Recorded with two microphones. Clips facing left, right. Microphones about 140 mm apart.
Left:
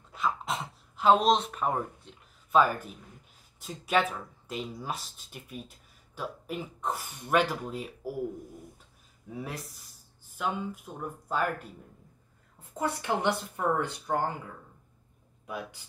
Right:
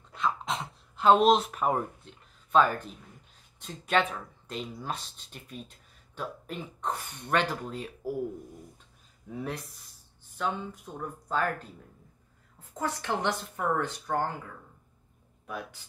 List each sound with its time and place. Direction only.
0.1 s a sound: centre (ahead or behind)
3.5 s speech: 5° left (ahead or behind)
9.3 s speech: 5° left (ahead or behind)
12.7 s speech: 10° left (ahead or behind)
15.4 s speech: 10° left (ahead or behind)